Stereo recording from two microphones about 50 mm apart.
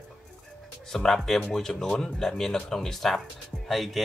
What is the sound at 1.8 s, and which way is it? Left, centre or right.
Speech, left.